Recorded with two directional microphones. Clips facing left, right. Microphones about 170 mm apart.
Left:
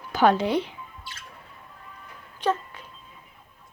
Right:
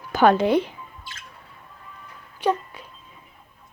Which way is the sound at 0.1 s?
55° right (ahead or behind).